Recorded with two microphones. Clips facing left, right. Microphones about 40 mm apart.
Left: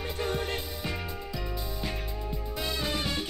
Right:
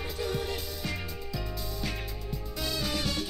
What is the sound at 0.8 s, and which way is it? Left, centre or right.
Music, left.